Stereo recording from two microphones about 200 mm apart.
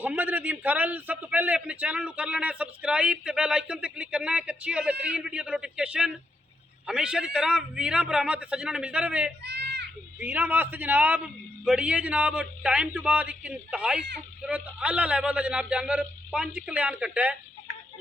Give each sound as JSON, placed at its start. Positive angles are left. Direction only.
{"t": 0.0, "sound": "a man's voice", "side_deg": -10}
{"t": 9.4, "sound": "a sound", "side_deg": -55}
{"t": 10.2, "sound": "a man's voice", "side_deg": -10}